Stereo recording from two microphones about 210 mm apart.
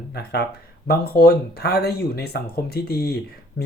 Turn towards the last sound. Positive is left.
turn(degrees=50)  # may be behind; listen again after turning